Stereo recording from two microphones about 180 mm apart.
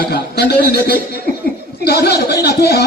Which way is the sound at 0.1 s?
65° left (ahead or behind).